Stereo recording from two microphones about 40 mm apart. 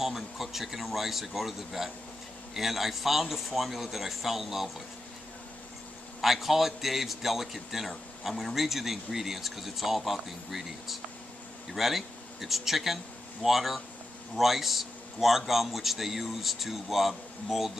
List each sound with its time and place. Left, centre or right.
0.0 s a man's voice: centre
6.2 s a man's voice: centre